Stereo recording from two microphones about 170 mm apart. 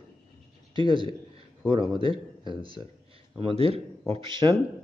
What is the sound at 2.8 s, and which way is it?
Speech, 15° right (ahead or behind).